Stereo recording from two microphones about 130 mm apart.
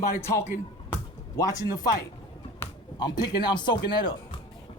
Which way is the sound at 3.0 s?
35° left (ahead or behind).